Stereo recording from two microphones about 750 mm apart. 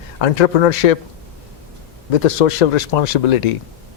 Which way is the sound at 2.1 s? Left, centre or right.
Left.